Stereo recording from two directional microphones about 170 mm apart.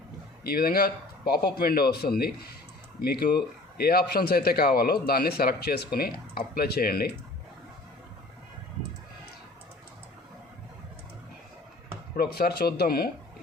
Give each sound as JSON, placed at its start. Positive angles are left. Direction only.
{"t": 0.4, "sound": "a man's voice", "side_deg": 65}
{"t": 12.1, "sound": "speech", "side_deg": 65}